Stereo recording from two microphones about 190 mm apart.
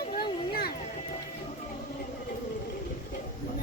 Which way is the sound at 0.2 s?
55° left (ahead or behind).